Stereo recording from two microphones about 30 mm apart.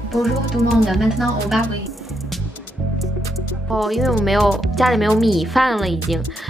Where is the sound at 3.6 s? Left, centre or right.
Centre.